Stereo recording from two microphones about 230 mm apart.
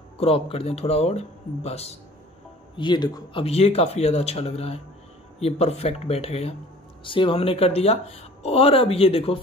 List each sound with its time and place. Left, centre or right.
0.2 s speech: left